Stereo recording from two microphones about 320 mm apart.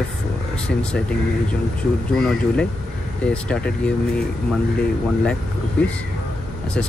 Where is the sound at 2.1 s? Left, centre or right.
Centre.